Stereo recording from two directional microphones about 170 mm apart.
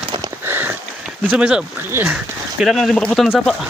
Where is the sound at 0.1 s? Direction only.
25° right (ahead or behind).